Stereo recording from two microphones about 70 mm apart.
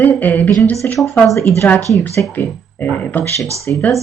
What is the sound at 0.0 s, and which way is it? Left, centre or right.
Speech, left.